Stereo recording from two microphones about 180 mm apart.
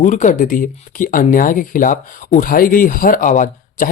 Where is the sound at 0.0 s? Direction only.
45° left (ahead or behind).